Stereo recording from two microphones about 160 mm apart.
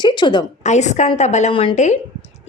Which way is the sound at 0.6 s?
45° left (ahead or behind).